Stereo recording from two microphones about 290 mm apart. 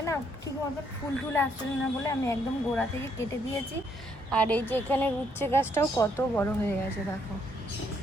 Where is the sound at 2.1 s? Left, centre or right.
Centre.